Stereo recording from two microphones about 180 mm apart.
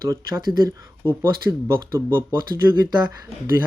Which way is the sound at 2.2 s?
15° right (ahead or behind).